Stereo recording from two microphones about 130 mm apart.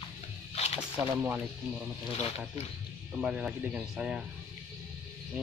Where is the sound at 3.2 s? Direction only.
5° right (ahead or behind).